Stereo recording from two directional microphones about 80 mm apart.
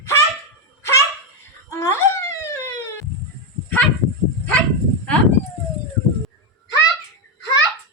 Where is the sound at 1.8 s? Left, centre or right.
Left.